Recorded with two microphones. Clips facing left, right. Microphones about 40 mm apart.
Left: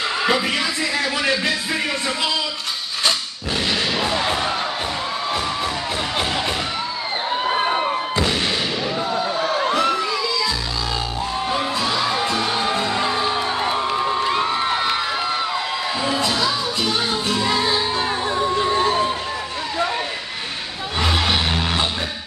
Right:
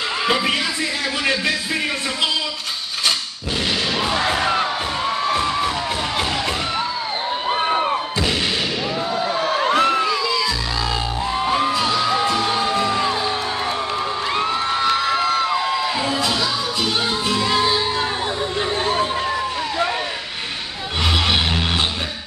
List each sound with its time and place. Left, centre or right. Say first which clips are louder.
4.3 s music: right 3 dB; right
7.4 s a sound: right 1 dB; centre
9.4 s crowd: right 3 dB; right
11.4 s music: right 5 dB; right
12.6 s music: right 1 dB; centre
14.2 s crowd: left 1 dB; centre
14.6 s crowd: right 2 dB; centre
17.3 s music: right 2 dB; right
21.0 s music: right 1 dB; right